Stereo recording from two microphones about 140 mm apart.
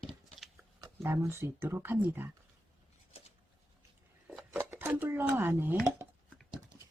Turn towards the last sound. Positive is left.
turn(degrees=-15)  # may be behind; listen again after turning